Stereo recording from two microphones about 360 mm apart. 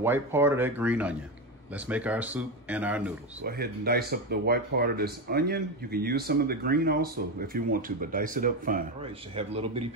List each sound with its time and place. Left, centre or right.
0.0 s speech: centre
3.4 s speech: right